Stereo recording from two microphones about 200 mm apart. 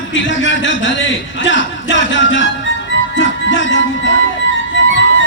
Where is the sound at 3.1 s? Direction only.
70° left (ahead or behind).